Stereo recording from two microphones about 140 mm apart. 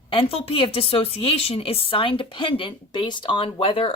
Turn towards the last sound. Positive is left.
turn(degrees=40)  # may be behind; listen again after turning